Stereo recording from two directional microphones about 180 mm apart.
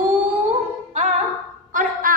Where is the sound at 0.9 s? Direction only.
40° right (ahead or behind).